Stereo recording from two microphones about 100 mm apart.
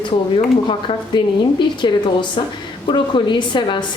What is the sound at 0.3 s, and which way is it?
A woman's voice, 60° left (ahead or behind).